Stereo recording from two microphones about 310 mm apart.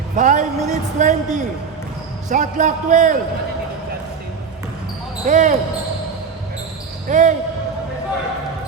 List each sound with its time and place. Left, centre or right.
0.2 s a man's voice: right
5.2 s a man's voice: right
7.1 s a man's voice: right